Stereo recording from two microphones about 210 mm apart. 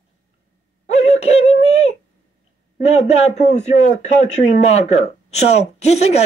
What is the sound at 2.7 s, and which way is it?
Speech, 30° left (ahead or behind).